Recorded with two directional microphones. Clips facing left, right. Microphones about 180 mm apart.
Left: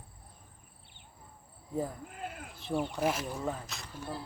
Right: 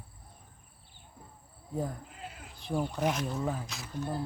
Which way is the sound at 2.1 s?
55° left (ahead or behind).